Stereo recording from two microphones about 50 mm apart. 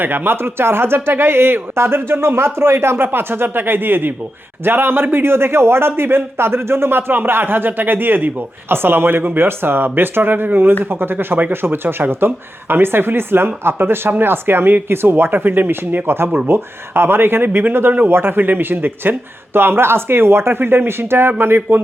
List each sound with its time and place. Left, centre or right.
0.0 s speech: right